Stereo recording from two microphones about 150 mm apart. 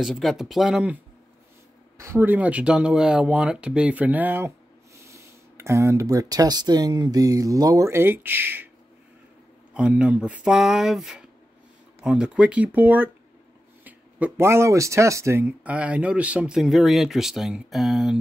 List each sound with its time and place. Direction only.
0.0 s speech: centre (ahead or behind)
9.8 s speech: 10° right (ahead or behind)